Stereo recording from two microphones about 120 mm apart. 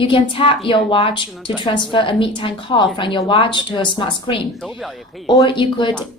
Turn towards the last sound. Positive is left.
turn(degrees=40)  # may be behind; listen again after turning